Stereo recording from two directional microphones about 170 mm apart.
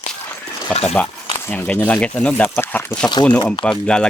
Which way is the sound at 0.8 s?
5° left (ahead or behind).